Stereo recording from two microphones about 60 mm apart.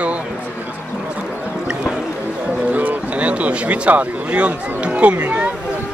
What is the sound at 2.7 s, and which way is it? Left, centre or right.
Speech, right.